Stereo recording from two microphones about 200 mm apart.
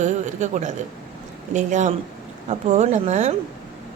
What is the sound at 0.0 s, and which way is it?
A man's voice, 35° right (ahead or behind).